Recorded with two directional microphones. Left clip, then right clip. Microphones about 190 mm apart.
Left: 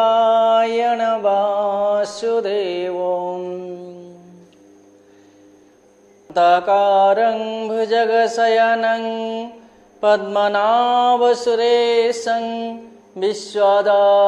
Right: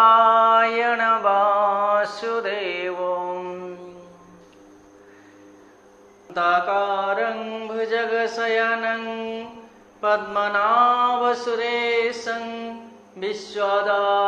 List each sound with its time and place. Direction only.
0.0 s mantra: 60° left (ahead or behind)
2.4 s music: 65° left (ahead or behind)
3.0 s mantra: 25° left (ahead or behind)
6.3 s mantra: 65° left (ahead or behind)